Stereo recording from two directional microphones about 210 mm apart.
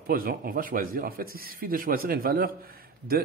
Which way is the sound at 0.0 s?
45° right (ahead or behind).